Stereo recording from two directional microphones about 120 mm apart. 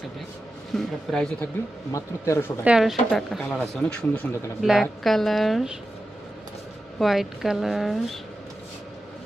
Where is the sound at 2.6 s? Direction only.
5° right (ahead or behind); by 4.4 s 15° left (ahead or behind).